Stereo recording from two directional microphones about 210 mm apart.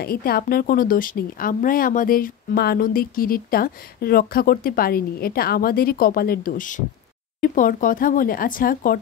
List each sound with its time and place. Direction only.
0.0 s speech: 45° left (ahead or behind)